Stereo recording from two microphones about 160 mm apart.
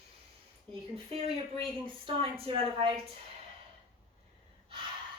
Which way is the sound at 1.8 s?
35° right (ahead or behind).